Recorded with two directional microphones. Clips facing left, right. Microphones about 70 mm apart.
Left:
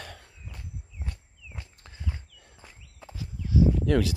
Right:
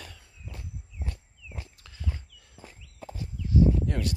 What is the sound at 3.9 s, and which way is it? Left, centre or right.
Speech, left.